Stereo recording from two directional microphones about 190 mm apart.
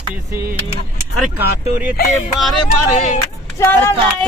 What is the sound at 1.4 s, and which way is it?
Speech, 10° right (ahead or behind).